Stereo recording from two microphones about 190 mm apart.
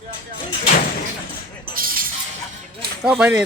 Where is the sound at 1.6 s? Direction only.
50° right (ahead or behind).